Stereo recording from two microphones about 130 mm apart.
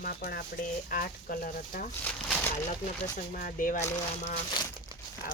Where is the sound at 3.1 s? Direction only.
90° left.